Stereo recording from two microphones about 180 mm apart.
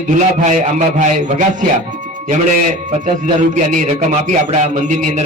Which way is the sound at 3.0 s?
45° right (ahead or behind).